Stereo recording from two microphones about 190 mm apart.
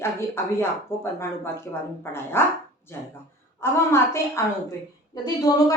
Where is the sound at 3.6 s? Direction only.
15° left (ahead or behind).